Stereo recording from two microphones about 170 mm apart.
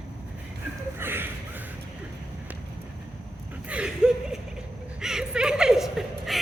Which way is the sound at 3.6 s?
5° right (ahead or behind).